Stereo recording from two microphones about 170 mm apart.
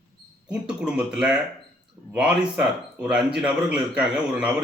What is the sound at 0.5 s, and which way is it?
A man's voice, 5° right (ahead or behind).